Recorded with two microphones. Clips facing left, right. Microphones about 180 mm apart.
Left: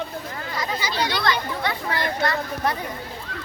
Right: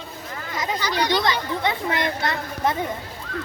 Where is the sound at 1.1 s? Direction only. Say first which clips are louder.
Right 2 dB; 15° right (ahead or behind).